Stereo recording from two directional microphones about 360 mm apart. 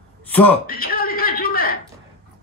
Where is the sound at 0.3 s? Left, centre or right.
Centre.